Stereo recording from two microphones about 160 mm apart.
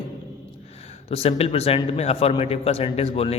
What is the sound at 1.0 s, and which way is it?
A man's voice, 40° left (ahead or behind).